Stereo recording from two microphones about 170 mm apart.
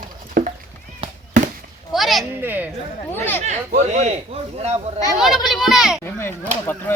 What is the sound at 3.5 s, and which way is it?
Speech, 45° right (ahead or behind).